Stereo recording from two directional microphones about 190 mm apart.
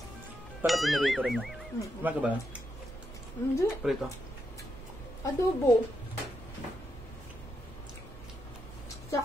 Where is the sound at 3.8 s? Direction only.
Centre (ahead or behind).